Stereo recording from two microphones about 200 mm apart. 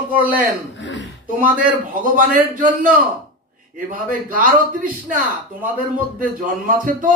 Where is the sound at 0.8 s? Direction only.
65° left (ahead or behind).